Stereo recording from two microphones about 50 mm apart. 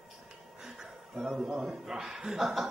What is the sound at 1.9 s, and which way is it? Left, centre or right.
Speech, centre.